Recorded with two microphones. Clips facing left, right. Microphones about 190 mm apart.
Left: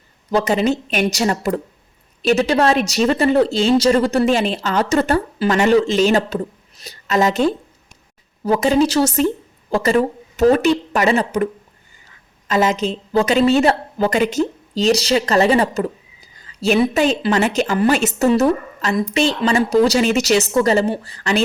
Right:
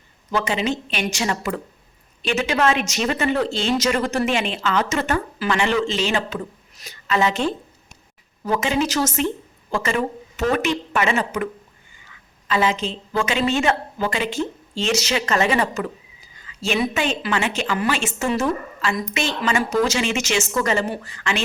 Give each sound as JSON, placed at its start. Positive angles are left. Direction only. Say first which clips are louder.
{"t": 0.3, "sound": "a woman's voice", "louder": "left 6 dB", "side_deg": 40}
{"t": 12.5, "sound": "a woman's voice", "louder": "left 4 dB", "side_deg": 40}